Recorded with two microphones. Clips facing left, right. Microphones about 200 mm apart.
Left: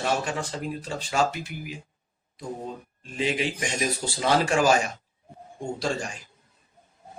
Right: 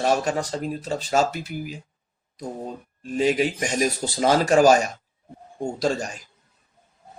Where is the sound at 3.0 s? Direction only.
45° right (ahead or behind).